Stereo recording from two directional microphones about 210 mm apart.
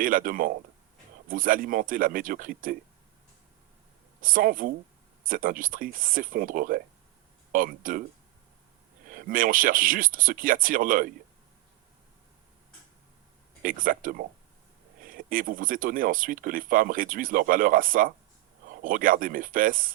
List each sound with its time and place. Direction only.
0.0 s speech: 40° right (ahead or behind)
4.2 s speech: 40° right (ahead or behind)
9.0 s speech: 40° right (ahead or behind)
13.6 s speech: 40° right (ahead or behind)